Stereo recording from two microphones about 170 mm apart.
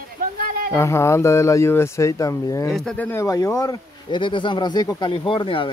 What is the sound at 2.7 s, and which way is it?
Speech, 5° left (ahead or behind).